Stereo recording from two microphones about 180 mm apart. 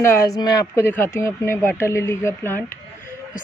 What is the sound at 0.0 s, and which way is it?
Speech, 15° left (ahead or behind).